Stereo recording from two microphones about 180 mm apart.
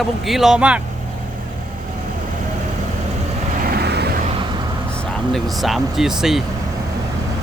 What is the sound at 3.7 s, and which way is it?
Vehicle, 65° right (ahead or behind).